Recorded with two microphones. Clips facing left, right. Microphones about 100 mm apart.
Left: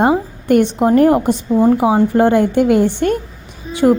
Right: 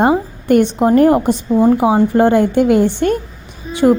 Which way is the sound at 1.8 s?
20° right (ahead or behind).